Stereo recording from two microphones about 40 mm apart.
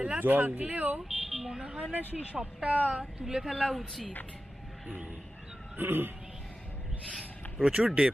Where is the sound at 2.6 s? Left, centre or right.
Right.